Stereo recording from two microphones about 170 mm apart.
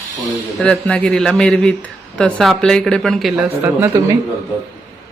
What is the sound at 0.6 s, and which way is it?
Speech, 5° left (ahead or behind).